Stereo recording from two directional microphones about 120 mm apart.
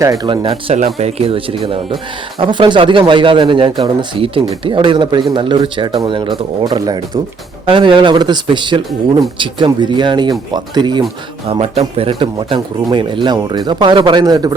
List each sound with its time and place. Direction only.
0.0 s speech: 30° right (ahead or behind)
0.3 s speech: 45° right (ahead or behind)
0.9 s speech: 55° right (ahead or behind); by 11.0 s 35° right (ahead or behind)
11.4 s speech: 55° right (ahead or behind); by 14.5 s 35° right (ahead or behind)